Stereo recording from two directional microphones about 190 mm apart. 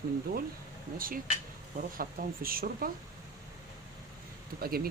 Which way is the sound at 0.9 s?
50° right (ahead or behind).